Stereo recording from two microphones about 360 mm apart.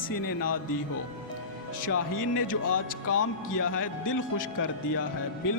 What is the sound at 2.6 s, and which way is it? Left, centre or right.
Speech, left.